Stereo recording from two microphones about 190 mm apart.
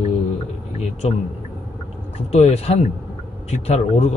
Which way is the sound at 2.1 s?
35° left (ahead or behind).